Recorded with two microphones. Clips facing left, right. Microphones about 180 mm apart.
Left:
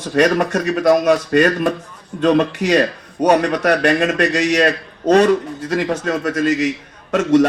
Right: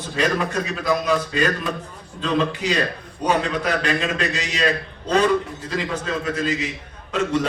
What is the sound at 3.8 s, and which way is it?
A man's voice, 50° left (ahead or behind).